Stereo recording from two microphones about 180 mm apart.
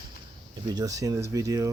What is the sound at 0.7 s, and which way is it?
Speech, 20° right (ahead or behind).